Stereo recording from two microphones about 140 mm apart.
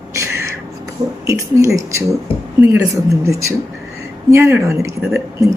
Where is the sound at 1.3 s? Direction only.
25° right (ahead or behind).